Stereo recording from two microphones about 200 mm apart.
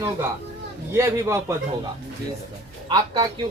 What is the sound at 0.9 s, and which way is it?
Speech, 15° right (ahead or behind).